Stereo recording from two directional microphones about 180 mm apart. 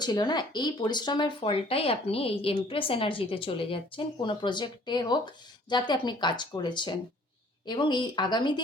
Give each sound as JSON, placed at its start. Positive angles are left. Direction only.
{"t": 0.0, "sound": "speech", "side_deg": 25}